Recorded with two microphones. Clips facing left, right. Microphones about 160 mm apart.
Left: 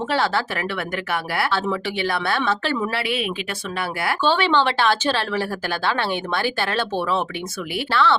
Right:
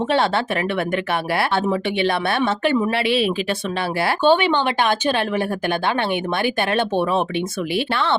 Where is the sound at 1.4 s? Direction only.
25° right (ahead or behind).